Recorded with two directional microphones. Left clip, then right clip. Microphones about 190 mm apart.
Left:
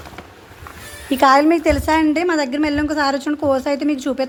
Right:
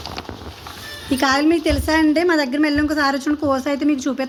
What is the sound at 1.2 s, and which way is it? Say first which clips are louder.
A woman's voice: left 5 dB; 15° left (ahead or behind).